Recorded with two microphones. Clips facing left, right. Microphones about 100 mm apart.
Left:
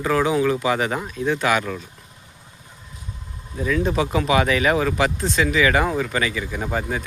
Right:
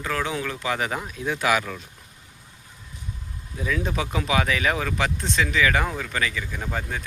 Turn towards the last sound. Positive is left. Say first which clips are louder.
# left 5 dB
turn(degrees=15)  # may be behind; listen again after turning